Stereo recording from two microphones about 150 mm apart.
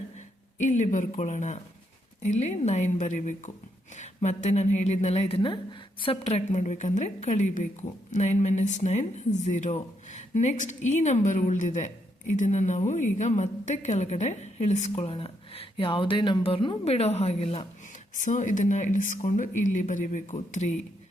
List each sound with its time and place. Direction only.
0.6 s a woman's voice: 55° left (ahead or behind)
18.1 s speech: 55° left (ahead or behind)